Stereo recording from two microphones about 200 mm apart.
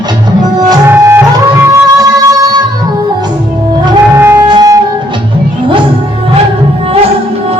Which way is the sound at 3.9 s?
15° right (ahead or behind).